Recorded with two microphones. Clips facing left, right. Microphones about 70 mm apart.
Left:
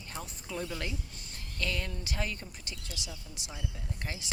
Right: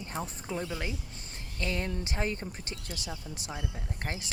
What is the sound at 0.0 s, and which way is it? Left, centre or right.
Speech, right.